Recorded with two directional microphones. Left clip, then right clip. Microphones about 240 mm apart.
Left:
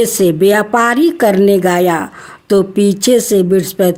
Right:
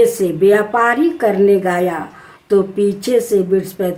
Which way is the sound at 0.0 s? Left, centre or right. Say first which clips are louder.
Left 1 dB; left.